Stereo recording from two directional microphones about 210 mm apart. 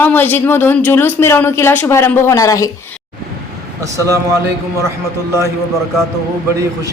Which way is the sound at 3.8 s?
15° right (ahead or behind).